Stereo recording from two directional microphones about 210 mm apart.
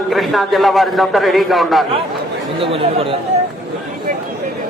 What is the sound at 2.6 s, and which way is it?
Speech, 25° right (ahead or behind).